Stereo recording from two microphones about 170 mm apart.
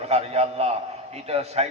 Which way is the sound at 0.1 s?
35° right (ahead or behind).